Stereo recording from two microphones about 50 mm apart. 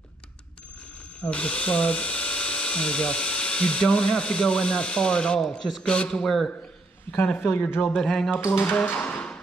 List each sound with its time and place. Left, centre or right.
1.2 s speech: left
5.6 s a man's voice: centre
5.9 s speech: centre
7.3 s a man's voice: left
7.9 s speech: centre
8.7 s a sound: left